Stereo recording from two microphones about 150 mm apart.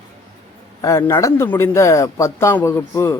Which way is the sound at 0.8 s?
20° left (ahead or behind).